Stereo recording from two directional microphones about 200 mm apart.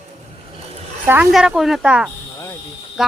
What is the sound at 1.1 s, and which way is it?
A woman's voice, 5° right (ahead or behind).